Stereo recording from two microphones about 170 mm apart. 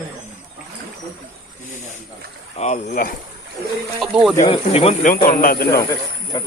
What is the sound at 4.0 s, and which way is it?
Speech, 5° right (ahead or behind).